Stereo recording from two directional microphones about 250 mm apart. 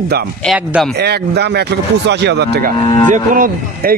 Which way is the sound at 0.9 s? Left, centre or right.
Right.